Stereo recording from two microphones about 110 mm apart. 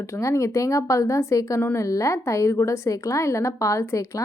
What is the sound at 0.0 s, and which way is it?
A woman's voice, 25° left (ahead or behind).